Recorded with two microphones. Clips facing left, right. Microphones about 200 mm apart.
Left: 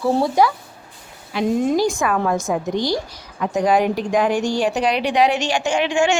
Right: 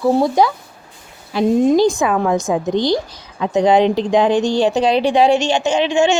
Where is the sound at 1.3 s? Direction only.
35° right (ahead or behind).